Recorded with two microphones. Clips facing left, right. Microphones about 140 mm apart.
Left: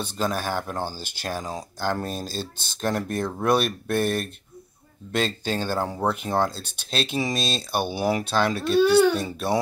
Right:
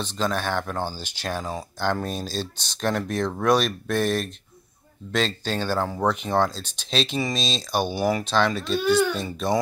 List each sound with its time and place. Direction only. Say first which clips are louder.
0.0 s speech: right 1 dB; 10° left (ahead or behind)
8.0 s speech: left 1 dB; 20° left (ahead or behind)
8.5 s a child's voice: left 6 dB; 65° left (ahead or behind)
9.1 s speech: even; 5° left (ahead or behind)